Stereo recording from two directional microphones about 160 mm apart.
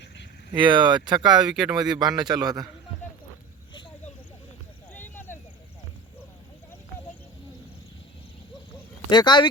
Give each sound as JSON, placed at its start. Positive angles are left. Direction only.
{"t": 0.5, "sound": "a man's voice", "side_deg": -30}
{"t": 1.2, "sound": "speech", "side_deg": -5}
{"t": 1.8, "sound": "a man's voice", "side_deg": -25}
{"t": 4.9, "sound": "a sound", "side_deg": 10}
{"t": 9.0, "sound": "speech", "side_deg": 25}